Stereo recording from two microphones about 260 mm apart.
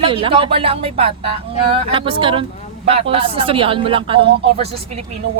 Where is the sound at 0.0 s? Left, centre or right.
Right.